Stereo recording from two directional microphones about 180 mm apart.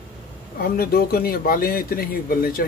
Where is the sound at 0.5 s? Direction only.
55° left (ahead or behind).